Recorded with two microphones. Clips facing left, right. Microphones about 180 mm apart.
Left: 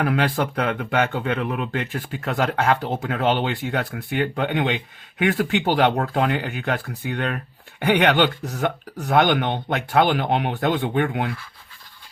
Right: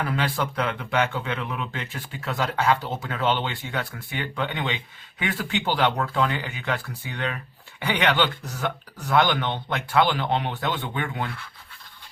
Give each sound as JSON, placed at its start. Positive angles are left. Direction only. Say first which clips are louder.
{"t": 0.0, "sound": "speech", "louder": "left 5 dB", "side_deg": 60}